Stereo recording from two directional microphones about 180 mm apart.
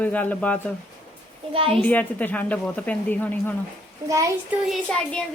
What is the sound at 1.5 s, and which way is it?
Speech, 30° right (ahead or behind).